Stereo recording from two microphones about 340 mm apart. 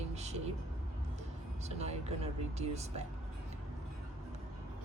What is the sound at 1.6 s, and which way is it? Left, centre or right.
Speech, centre.